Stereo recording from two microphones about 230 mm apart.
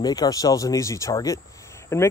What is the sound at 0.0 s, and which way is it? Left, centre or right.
Speech, centre.